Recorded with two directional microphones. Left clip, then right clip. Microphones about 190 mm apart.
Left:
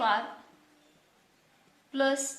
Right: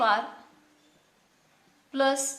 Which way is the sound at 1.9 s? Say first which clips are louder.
Right 3 dB; 30° right (ahead or behind).